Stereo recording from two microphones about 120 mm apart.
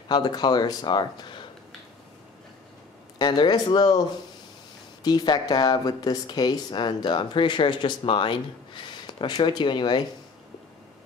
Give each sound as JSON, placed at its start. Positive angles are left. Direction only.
{"t": 0.1, "sound": "speech", "side_deg": 35}
{"t": 3.2, "sound": "speech", "side_deg": 35}
{"t": 5.0, "sound": "speech", "side_deg": 35}